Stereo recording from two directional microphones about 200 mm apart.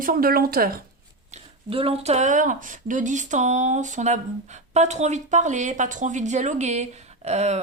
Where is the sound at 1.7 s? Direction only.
30° right (ahead or behind).